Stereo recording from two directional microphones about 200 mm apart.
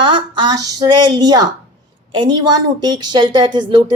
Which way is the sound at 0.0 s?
25° right (ahead or behind).